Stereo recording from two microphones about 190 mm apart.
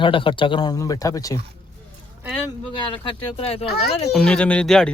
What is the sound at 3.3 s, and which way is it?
Speech, 30° left (ahead or behind).